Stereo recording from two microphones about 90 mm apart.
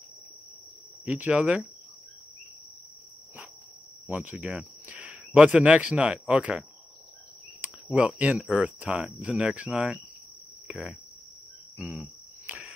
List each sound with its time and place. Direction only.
1.0 s speech: 15° right (ahead or behind)
4.1 s speech: 20° right (ahead or behind)
7.6 s speech: 15° right (ahead or behind)
12.0 s cricket: 15° right (ahead or behind)